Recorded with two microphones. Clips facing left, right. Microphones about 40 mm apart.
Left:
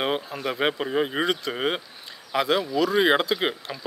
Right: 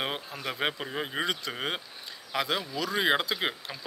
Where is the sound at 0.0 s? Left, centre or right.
Centre.